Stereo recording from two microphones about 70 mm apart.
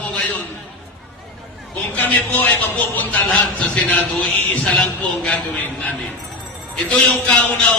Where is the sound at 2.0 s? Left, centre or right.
Left.